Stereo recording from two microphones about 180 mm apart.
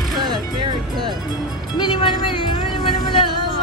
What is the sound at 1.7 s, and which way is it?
Music, 25° left (ahead or behind).